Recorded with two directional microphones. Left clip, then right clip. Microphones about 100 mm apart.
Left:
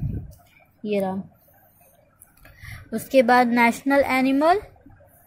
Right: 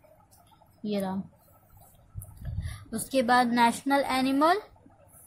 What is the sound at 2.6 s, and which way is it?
A woman's voice, 40° left (ahead or behind).